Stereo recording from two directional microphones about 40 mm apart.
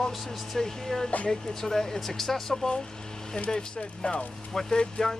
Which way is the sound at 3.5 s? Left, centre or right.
Left.